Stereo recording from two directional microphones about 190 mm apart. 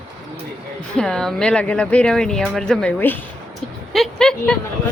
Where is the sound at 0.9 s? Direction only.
5° left (ahead or behind).